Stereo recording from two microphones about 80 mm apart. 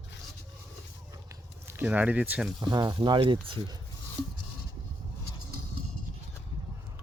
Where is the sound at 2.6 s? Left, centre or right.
Right.